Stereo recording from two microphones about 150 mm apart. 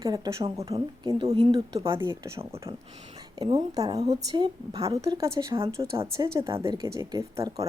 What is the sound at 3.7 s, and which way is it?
Speech, 25° right (ahead or behind).